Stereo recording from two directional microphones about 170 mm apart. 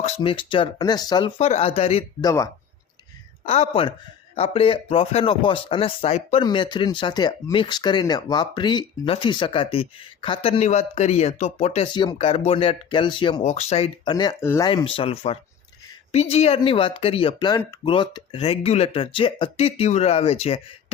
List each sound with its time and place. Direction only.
0.2 s speech: 30° left (ahead or behind)
1.4 s speech: 35° left (ahead or behind)
2.2 s speech: 20° left (ahead or behind)
3.4 s speech: 35° left (ahead or behind)
11.9 s speech: 25° left (ahead or behind)
13.4 s speech: 40° left (ahead or behind)
14.1 s speech: 25° left (ahead or behind)
14.7 s speech: 30° left (ahead or behind)